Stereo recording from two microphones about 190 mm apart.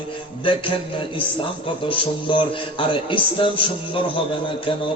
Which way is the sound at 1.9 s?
25° left (ahead or behind).